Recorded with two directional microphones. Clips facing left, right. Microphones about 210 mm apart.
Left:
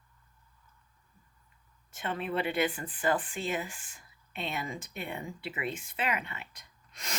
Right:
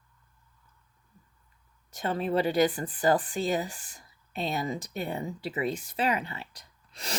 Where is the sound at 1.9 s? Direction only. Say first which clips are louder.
Right 5 dB; 35° right (ahead or behind).